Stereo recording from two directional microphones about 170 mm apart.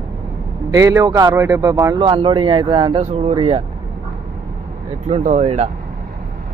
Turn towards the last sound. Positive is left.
turn(degrees=-40)  # may be behind; listen again after turning